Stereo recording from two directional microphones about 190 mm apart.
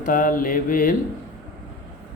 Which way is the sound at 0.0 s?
45° left (ahead or behind).